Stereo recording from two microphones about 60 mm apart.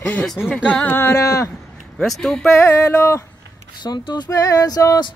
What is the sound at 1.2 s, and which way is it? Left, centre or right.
Speech, left.